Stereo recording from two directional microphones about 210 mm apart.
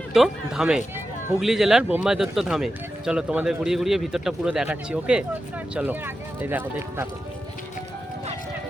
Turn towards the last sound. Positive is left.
turn(degrees=-10)  # may be behind; listen again after turning